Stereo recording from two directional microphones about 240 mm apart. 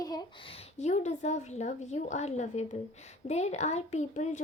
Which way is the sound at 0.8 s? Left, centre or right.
Left.